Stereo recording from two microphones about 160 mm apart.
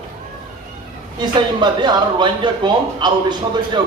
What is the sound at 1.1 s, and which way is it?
Speech, 25° right (ahead or behind).